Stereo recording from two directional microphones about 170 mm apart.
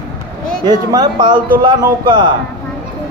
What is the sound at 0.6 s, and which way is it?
A man's voice, 25° right (ahead or behind).